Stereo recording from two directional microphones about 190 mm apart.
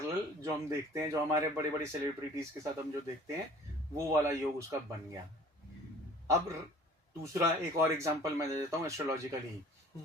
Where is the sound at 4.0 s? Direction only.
15° right (ahead or behind).